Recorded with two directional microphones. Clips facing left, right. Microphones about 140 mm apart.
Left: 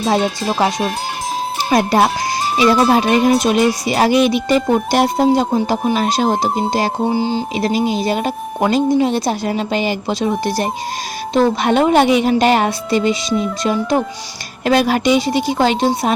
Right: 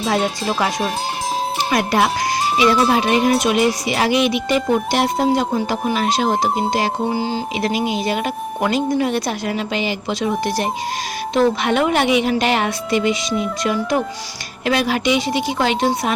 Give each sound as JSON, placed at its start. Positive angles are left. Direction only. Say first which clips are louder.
{"t": 0.0, "sound": "speech", "louder": "left 3 dB", "side_deg": 30}
{"t": 1.7, "sound": "a woman's voice", "louder": "left 4 dB", "side_deg": 35}
{"t": 7.1, "sound": "speech", "louder": "left 4 dB", "side_deg": 20}
{"t": 7.5, "sound": "a woman's voice", "louder": "left 2 dB", "side_deg": 35}
{"t": 14.6, "sound": "a woman's voice", "louder": "left 4 dB", "side_deg": 40}